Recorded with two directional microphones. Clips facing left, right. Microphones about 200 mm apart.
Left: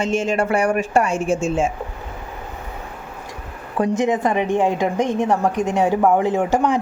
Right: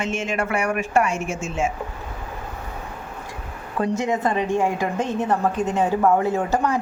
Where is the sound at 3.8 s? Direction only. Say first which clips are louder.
Left 4 dB; 15° left (ahead or behind).